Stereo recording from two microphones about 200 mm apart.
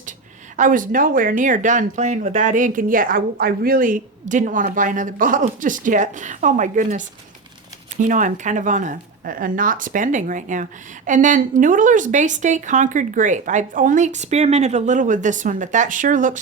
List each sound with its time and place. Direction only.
0.5 s speech: 40° right (ahead or behind)